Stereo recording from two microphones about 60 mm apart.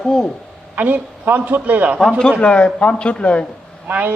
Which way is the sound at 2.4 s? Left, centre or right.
Centre.